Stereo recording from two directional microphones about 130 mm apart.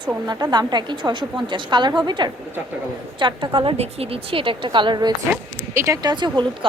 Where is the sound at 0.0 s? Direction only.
30° right (ahead or behind).